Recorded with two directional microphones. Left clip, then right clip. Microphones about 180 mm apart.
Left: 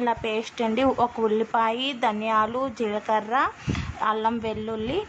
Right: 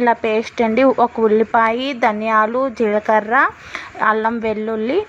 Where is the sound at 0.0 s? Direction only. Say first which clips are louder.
Right 10 dB; 30° right (ahead or behind).